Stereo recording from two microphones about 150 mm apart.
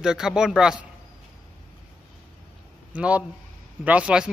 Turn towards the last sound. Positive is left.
turn(degrees=-5)  # may be behind; listen again after turning